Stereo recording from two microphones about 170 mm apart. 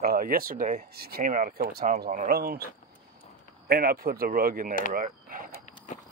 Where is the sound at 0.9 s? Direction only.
65° right (ahead or behind).